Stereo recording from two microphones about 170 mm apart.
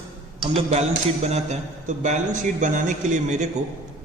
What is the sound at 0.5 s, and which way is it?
A man's voice, 40° right (ahead or behind).